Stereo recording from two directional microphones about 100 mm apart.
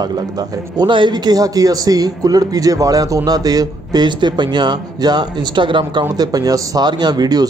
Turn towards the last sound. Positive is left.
turn(degrees=-45)  # may be behind; listen again after turning